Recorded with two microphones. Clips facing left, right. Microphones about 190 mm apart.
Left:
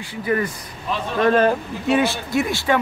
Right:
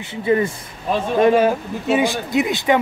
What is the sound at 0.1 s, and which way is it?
Speech, 25° right (ahead or behind).